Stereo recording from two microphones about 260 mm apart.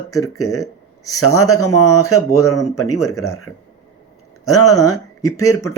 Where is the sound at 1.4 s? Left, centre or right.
Left.